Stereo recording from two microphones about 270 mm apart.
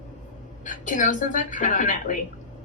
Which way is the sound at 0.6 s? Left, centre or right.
Left.